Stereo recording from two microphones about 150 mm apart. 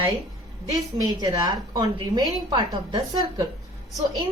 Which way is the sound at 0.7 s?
25° right (ahead or behind).